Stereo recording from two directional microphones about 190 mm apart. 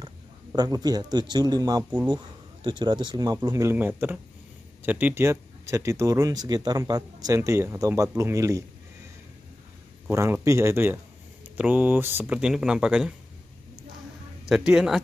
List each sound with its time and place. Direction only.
0.0 s speech: 20° right (ahead or behind)
10.1 s speech: 15° right (ahead or behind)
14.5 s speech: 5° right (ahead or behind)